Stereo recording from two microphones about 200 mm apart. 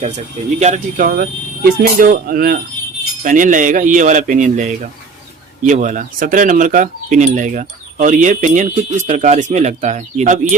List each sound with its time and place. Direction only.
0.6 s speech: 40° right (ahead or behind)